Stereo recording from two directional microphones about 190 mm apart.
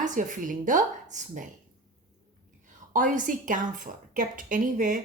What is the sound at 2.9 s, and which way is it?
Speech, 45° right (ahead or behind).